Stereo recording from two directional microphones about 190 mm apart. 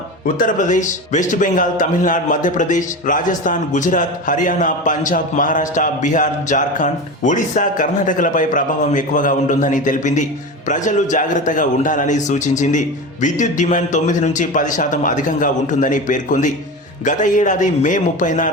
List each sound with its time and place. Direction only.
0.3 s a man's voice: 45° left (ahead or behind)